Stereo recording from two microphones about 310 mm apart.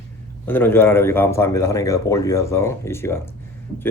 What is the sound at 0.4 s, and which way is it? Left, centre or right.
Speech, centre.